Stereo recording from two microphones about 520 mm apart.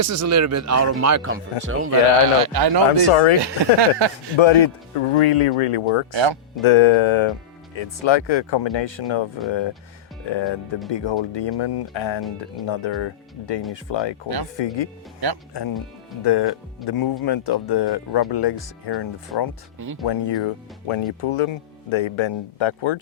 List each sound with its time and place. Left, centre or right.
0.0 s speech: right
2.9 s speech: left
3.4 s speech: right
4.4 s speech: left
16.2 s speech: left
20.8 s speech: left